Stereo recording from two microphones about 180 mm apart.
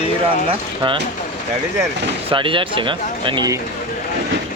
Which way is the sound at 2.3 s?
30° right (ahead or behind).